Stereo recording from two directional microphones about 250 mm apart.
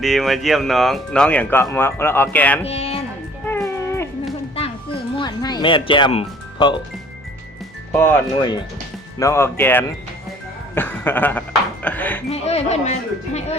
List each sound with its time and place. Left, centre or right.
0.0 s speech: centre
2.6 s speech: left
3.4 s music: centre
5.1 s music: centre
7.9 s speech: centre
10.8 s a sound: centre
12.3 s speech: left